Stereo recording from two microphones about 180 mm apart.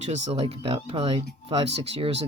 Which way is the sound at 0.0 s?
35° right (ahead or behind).